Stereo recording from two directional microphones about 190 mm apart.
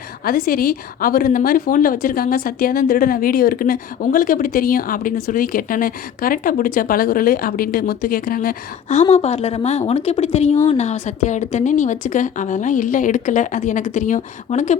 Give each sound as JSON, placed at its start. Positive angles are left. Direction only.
{"t": 0.3, "sound": "a woman's voice", "side_deg": 50}